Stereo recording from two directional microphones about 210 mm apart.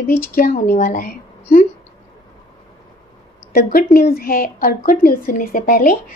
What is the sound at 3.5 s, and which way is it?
A woman's voice, 45° left (ahead or behind).